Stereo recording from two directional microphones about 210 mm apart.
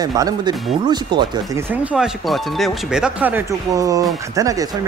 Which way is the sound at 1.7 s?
5° right (ahead or behind).